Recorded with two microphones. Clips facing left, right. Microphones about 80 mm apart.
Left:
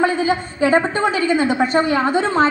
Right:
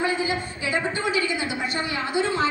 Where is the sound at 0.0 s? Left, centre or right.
Left.